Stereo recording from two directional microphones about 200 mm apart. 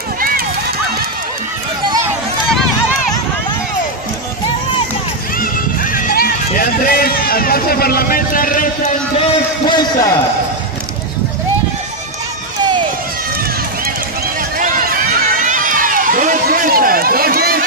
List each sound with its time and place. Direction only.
5.4 s music: 45° left (ahead or behind)
9.7 s a man's voice: 20° left (ahead or behind)
14.6 s run: 45° right (ahead or behind)